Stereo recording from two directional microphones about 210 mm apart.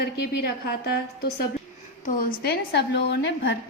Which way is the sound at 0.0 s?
50° left (ahead or behind).